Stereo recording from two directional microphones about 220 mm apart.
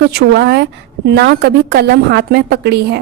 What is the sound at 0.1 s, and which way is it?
A woman's voice, 50° right (ahead or behind).